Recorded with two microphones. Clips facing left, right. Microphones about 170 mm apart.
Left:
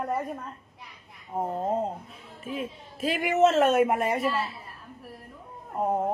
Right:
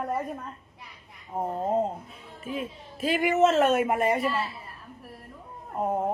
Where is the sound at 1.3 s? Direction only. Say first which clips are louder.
Right 1 dB; centre (ahead or behind).